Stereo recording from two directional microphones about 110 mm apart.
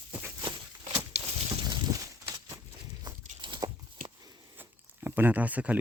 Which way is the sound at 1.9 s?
30° right (ahead or behind).